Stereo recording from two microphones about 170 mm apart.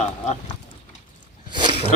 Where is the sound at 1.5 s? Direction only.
30° right (ahead or behind).